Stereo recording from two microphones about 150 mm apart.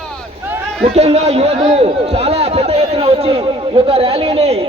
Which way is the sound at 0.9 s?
45° right (ahead or behind).